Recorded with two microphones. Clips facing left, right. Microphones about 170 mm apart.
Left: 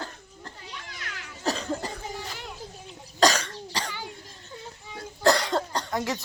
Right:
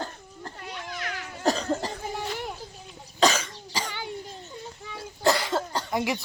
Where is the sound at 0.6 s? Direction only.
60° right (ahead or behind).